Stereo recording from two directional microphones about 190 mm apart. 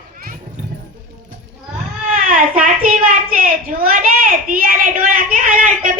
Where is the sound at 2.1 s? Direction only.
45° right (ahead or behind).